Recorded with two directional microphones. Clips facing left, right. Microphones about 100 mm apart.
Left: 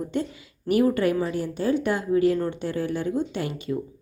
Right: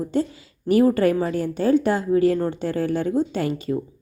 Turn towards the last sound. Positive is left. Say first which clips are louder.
# right 3 dB
turn(degrees=-55)  # may be behind; listen again after turning